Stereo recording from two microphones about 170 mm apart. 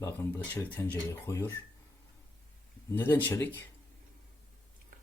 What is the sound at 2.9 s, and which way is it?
Speech, 10° left (ahead or behind).